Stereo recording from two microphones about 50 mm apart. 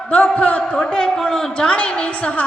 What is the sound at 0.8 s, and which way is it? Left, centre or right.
Speech, centre.